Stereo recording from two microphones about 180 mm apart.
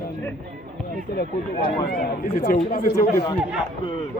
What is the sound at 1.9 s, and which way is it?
Speech, 60° left (ahead or behind).